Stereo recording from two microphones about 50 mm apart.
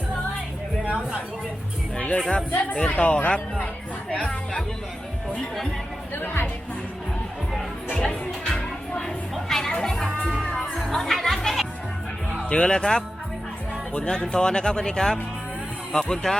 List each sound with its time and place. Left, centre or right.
2.0 s speech: left
6.1 s speech: left
8.0 s music: centre
9.3 s a sound: centre
9.8 s music: centre
12.5 s speech: centre